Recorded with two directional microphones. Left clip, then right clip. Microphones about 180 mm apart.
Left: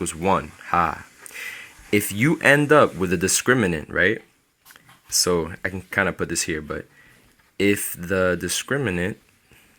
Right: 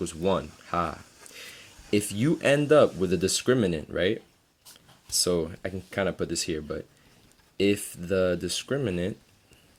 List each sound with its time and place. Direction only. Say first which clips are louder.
0.0 s speech: left 5 dB; 15° left (ahead or behind)
5.2 s speech: left 5 dB; 15° left (ahead or behind)